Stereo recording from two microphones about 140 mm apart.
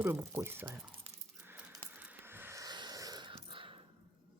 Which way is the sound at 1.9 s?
10° right (ahead or behind).